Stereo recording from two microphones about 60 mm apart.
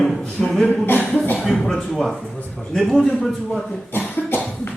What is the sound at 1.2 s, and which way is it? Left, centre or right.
Speech, left.